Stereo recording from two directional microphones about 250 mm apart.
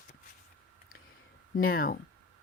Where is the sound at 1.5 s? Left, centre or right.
Left.